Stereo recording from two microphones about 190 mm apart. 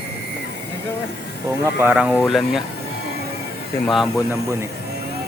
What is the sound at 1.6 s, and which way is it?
Speech, 15° right (ahead or behind).